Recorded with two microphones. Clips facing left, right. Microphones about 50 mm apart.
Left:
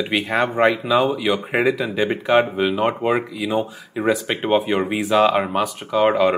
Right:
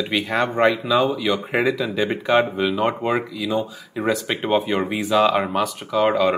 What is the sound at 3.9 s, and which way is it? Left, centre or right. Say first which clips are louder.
Speech: left 2 dB; centre.